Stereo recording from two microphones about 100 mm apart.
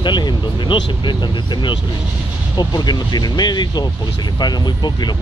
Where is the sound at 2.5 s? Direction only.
45° left (ahead or behind).